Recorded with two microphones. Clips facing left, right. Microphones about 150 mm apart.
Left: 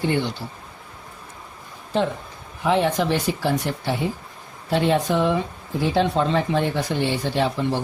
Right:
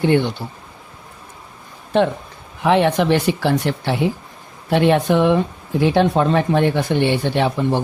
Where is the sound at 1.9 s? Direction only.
65° right (ahead or behind).